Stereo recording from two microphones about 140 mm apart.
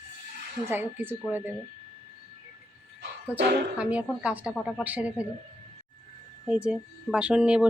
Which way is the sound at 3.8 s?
10° right (ahead or behind).